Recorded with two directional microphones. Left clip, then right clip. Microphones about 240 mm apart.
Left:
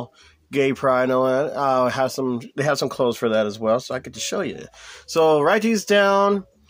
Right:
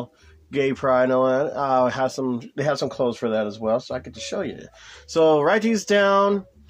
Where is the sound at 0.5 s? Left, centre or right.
Left.